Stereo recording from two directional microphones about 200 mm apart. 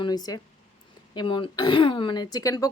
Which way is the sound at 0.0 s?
20° left (ahead or behind).